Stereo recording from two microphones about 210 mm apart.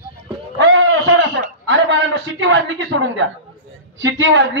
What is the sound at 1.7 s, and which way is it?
A man's voice, 60° right (ahead or behind).